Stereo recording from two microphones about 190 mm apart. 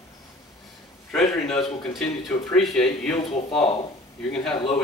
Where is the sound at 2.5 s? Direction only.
Centre (ahead or behind).